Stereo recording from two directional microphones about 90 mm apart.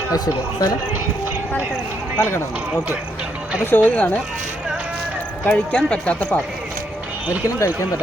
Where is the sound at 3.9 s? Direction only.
15° left (ahead or behind).